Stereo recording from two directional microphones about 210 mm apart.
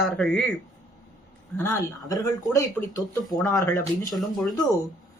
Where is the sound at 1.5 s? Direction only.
15° left (ahead or behind).